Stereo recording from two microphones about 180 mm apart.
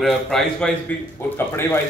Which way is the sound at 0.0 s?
Centre (ahead or behind).